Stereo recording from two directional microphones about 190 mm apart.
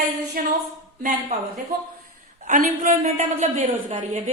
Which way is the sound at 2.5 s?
40° right (ahead or behind).